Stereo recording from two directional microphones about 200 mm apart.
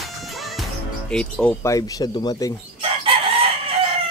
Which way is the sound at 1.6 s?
20° left (ahead or behind).